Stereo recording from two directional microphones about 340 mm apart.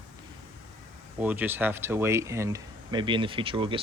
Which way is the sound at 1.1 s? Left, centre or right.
Centre.